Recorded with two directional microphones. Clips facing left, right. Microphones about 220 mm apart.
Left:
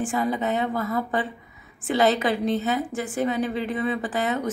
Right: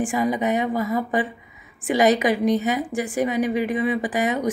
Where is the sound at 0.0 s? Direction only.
15° right (ahead or behind).